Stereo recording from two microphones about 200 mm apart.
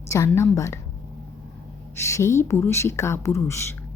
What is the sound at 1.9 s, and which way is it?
Speech, 15° left (ahead or behind).